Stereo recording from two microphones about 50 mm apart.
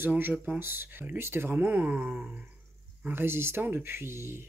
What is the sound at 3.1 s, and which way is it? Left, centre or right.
Speech, right.